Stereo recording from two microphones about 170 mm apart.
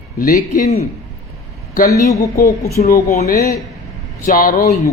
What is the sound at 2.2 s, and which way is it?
Speech, 55° left (ahead or behind).